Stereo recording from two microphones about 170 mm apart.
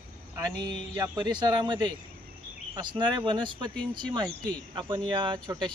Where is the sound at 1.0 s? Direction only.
25° right (ahead or behind).